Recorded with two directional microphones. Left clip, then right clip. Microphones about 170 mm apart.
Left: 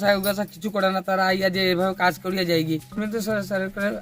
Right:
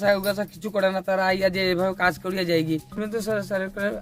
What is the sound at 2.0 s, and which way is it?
Speech, 30° right (ahead or behind).